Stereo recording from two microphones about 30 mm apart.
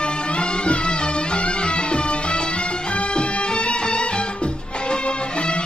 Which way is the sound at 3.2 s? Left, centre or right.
Left.